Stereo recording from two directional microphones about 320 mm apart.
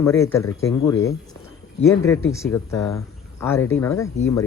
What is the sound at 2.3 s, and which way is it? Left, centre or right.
Speech, centre.